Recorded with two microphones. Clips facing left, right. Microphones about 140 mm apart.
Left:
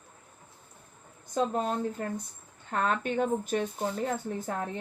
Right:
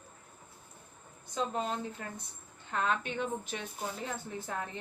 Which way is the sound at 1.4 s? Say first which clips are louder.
Left 5 dB; 45° left (ahead or behind).